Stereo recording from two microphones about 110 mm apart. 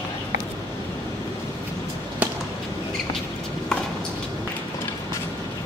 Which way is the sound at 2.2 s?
15° right (ahead or behind).